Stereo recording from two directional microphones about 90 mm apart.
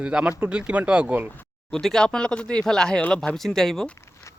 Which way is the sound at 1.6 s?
5° left (ahead or behind).